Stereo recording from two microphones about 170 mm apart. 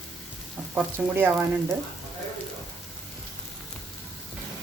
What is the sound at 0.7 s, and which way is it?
Speech, 15° right (ahead or behind).